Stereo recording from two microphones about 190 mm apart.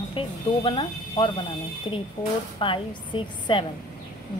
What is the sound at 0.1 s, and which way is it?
Speech, 25° left (ahead or behind).